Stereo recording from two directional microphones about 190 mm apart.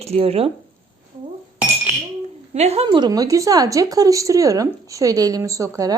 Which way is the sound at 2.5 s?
35° right (ahead or behind).